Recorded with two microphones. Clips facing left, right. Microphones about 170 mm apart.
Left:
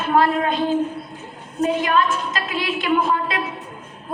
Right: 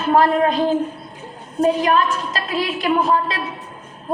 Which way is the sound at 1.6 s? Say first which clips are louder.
Right 3 dB; 35° right (ahead or behind).